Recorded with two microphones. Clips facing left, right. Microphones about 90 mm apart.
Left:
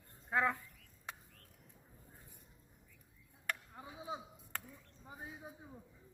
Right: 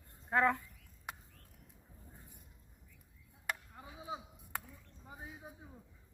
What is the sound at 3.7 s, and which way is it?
Chop, 15° left (ahead or behind).